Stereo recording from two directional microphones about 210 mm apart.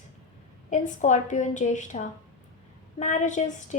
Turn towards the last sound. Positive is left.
turn(degrees=35)  # may be behind; listen again after turning